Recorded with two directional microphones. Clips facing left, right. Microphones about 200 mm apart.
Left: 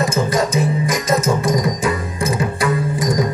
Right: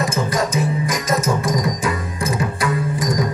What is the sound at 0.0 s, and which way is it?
Music, 25° left (ahead or behind).